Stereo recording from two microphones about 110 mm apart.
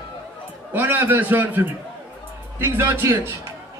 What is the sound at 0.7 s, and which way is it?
A man's voice, 20° right (ahead or behind).